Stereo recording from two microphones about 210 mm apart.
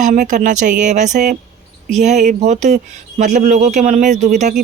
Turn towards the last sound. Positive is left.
turn(degrees=-35)  # may be behind; listen again after turning